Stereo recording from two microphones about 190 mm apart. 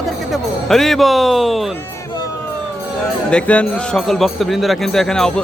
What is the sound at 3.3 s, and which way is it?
A man's voice, 5° left (ahead or behind).